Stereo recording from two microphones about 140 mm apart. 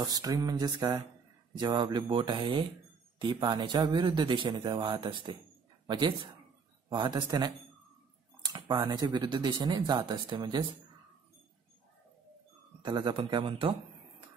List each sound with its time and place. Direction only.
0.0 s a sound: 25° right (ahead or behind)
1.6 s speech: 30° right (ahead or behind)
12.8 s speech: 35° right (ahead or behind)